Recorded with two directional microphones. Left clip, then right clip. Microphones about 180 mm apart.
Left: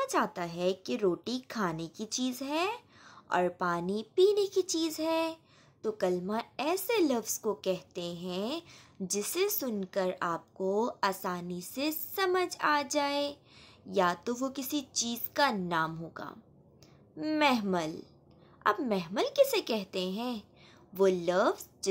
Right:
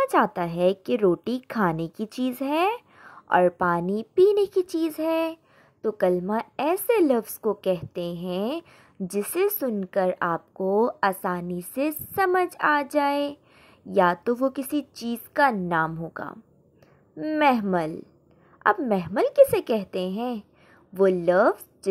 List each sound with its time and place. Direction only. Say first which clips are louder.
0.0 s a woman's voice: right 9 dB; 45° right (ahead or behind)